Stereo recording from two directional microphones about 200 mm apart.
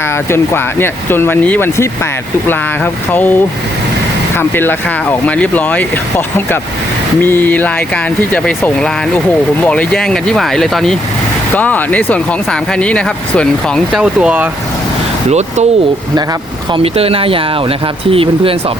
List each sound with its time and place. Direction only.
0.3 s speech: 10° left (ahead or behind)
4.4 s speech: 10° left (ahead or behind)
15.3 s speech: 35° right (ahead or behind)
16.7 s speech: 30° right (ahead or behind)